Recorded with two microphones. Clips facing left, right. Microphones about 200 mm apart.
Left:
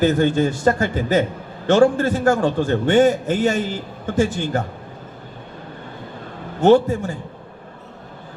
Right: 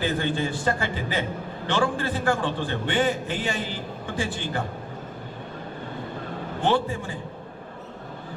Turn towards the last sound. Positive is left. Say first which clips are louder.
# left 10 dB
turn(degrees=45)  # may be behind; listen again after turning